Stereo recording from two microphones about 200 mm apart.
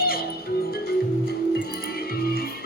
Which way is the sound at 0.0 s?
50° left (ahead or behind).